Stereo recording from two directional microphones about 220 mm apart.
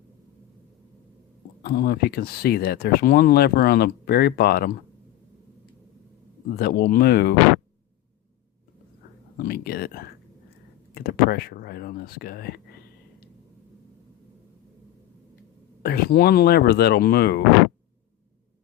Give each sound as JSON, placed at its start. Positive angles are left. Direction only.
{"t": 1.6, "sound": "speech", "side_deg": 45}
{"t": 6.6, "sound": "speech", "side_deg": 45}
{"t": 9.4, "sound": "speech", "side_deg": 45}
{"t": 15.8, "sound": "speech", "side_deg": 45}